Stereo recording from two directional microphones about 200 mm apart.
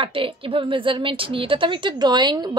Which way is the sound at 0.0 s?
25° right (ahead or behind).